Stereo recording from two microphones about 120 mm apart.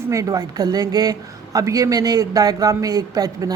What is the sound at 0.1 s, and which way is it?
A man's voice, 30° right (ahead or behind).